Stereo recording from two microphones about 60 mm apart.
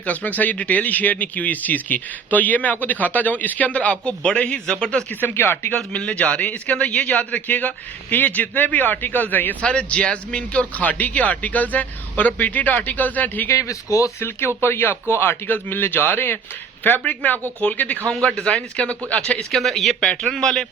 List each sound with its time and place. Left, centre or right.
0.0 s speech: left
5.2 s speech: left
5.9 s speech: centre
9.6 s speech: centre
13.5 s speech: left
14.2 s speech: left
18.1 s speech: centre
19.4 s a man's voice: centre